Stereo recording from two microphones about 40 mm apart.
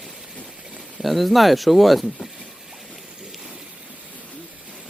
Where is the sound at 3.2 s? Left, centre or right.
Centre.